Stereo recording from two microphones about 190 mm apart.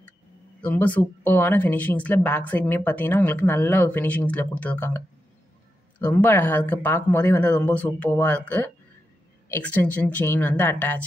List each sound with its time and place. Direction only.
0.6 s speech: 10° left (ahead or behind)